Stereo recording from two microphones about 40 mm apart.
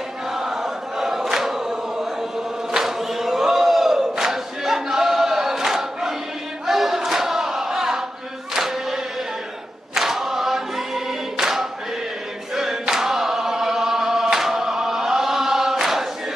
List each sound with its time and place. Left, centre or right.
0.4 s chant: centre
2.7 s battle cry: centre
8.5 s chant: centre
9.9 s choir: centre